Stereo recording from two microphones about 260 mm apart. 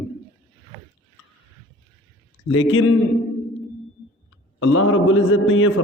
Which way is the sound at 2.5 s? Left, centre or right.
Left.